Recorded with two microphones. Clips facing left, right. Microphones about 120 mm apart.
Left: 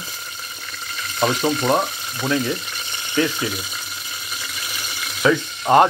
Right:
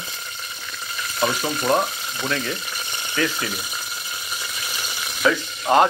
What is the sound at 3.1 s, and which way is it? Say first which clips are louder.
Speech: left 4 dB; 20° left (ahead or behind).